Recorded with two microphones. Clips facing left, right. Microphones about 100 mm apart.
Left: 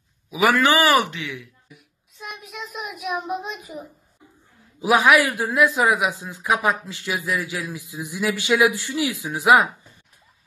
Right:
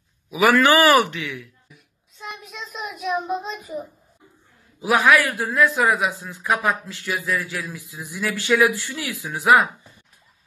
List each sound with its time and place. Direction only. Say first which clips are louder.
0.3 s a man's voice: right 2 dB; 20° left (ahead or behind)
2.1 s a child's voice: even; 5° left (ahead or behind)
4.8 s a man's voice: left 1 dB; 15° left (ahead or behind)